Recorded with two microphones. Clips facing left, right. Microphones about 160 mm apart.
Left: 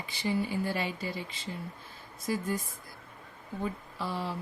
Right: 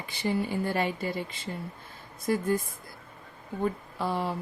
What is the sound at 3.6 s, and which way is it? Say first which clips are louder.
Speech: right 6 dB; 55° right (ahead or behind).